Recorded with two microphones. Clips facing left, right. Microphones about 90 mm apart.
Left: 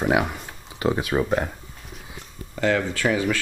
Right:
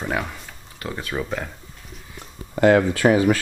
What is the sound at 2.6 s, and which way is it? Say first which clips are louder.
Speech: right 6 dB; 40° right (ahead or behind).